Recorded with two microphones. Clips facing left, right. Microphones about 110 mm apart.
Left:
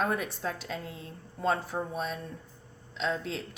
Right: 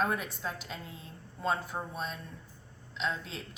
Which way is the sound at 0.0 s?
50° left (ahead or behind).